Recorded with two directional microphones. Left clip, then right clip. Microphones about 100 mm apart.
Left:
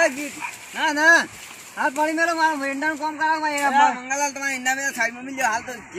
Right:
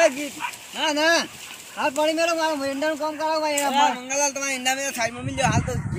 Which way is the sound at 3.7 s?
30° right (ahead or behind).